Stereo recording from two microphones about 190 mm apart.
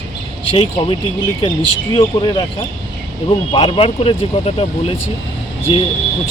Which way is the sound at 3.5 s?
30° left (ahead or behind).